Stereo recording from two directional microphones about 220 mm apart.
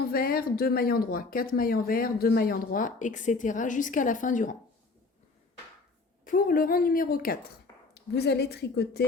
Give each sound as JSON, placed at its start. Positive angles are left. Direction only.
{"t": 0.1, "sound": "speech", "side_deg": 45}
{"t": 6.2, "sound": "a woman's voice", "side_deg": 40}